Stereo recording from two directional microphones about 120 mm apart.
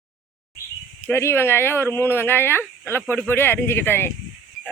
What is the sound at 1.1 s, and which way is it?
A woman's voice, 20° left (ahead or behind).